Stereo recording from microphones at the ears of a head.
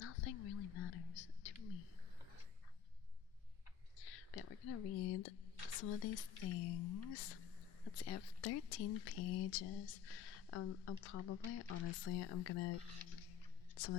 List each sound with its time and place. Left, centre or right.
0.0 s whispering: left
3.9 s speech: left